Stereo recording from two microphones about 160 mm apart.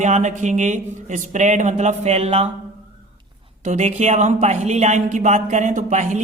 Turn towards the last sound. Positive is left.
turn(degrees=-50)  # may be behind; listen again after turning